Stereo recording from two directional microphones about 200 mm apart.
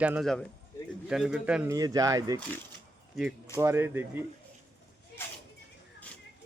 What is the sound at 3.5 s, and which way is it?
Speech, 10° right (ahead or behind).